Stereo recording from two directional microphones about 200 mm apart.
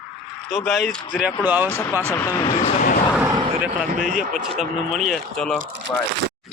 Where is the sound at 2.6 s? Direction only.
40° left (ahead or behind).